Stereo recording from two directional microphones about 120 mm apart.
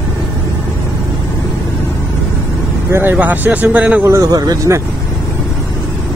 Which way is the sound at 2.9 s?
15° right (ahead or behind).